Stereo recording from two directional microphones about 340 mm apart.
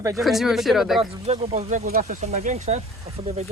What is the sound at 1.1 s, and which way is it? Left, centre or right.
Speech, centre.